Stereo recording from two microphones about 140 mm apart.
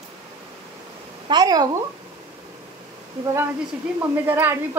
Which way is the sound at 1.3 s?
30° right (ahead or behind).